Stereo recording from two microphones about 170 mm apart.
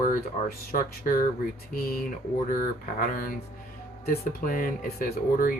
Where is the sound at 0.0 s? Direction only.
55° left (ahead or behind).